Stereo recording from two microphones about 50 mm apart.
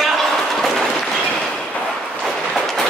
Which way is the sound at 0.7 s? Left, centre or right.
Centre.